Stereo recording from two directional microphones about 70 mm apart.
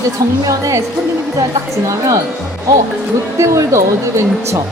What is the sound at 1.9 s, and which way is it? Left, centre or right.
Speech, right.